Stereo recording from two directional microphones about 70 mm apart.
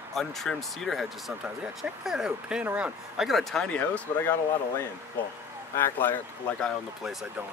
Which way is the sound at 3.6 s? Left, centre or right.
Centre.